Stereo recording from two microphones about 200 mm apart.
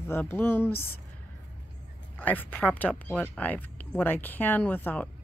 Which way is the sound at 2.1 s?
10° left (ahead or behind).